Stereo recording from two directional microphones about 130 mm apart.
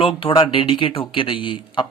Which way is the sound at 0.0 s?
45° left (ahead or behind).